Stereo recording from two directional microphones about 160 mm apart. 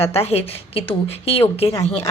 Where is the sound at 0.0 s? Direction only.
40° left (ahead or behind).